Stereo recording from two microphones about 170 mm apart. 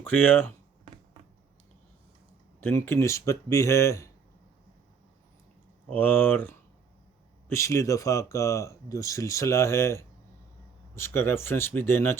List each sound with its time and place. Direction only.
0.0 s speech: 10° left (ahead or behind)
2.6 s speech: 15° left (ahead or behind)
5.9 s speech: 10° left (ahead or behind)